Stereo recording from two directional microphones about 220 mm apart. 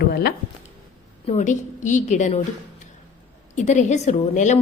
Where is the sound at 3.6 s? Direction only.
35° left (ahead or behind).